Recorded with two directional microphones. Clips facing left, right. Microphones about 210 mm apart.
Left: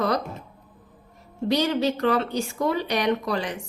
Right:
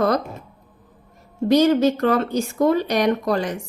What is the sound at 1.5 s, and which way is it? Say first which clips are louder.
A woman's voice: right 7 dB; 45° right (ahead or behind).